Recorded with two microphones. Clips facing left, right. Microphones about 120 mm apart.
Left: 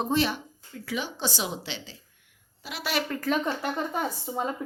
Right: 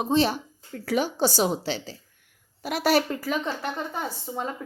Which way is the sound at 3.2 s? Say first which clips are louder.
Left 1 dB; centre (ahead or behind).